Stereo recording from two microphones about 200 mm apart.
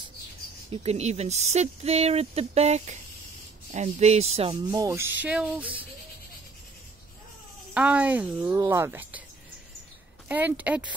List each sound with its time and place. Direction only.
0.7 s speech: 30° right (ahead or behind)
4.6 s speech: 20° right (ahead or behind)
7.7 s speech: 5° right (ahead or behind)
10.2 s speech: 10° right (ahead or behind)